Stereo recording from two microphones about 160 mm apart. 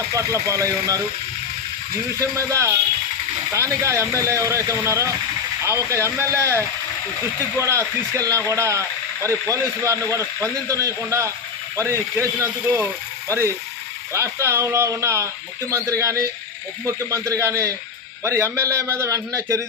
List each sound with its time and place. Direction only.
0.1 s speech: 20° right (ahead or behind)
2.1 s speech: 20° right (ahead or behind)